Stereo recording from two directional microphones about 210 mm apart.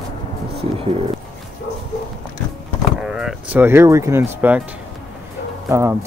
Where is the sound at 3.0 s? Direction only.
5° right (ahead or behind).